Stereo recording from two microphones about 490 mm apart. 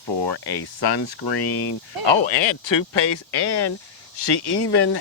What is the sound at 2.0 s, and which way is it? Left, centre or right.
Speech, left.